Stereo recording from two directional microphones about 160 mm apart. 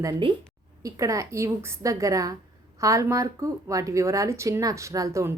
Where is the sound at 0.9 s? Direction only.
20° right (ahead or behind).